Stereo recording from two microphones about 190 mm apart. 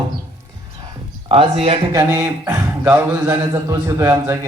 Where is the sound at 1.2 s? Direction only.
30° right (ahead or behind).